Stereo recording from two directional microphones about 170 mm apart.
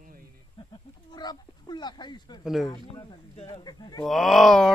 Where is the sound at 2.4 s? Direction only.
Centre (ahead or behind).